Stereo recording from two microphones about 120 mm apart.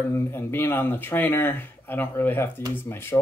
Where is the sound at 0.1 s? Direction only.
20° left (ahead or behind).